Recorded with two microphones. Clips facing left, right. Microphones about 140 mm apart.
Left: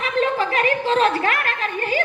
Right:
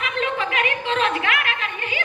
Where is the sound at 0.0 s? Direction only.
35° left (ahead or behind).